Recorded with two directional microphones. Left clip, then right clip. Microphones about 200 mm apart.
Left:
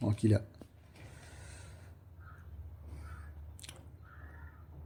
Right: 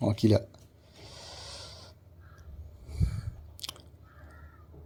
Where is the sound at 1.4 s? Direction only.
20° right (ahead or behind).